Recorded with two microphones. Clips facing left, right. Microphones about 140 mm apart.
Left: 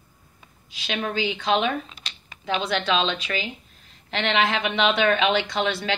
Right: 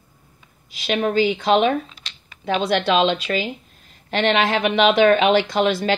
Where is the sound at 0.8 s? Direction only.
40° right (ahead or behind).